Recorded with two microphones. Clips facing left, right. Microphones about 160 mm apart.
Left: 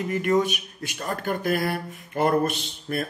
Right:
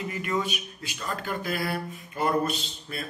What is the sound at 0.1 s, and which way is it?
Speech, 50° left (ahead or behind).